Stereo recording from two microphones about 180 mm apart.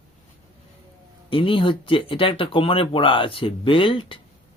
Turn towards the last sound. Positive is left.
turn(degrees=30)  # may be behind; listen again after turning